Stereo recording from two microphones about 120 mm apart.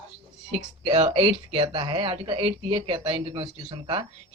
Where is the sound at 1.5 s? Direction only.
50° right (ahead or behind).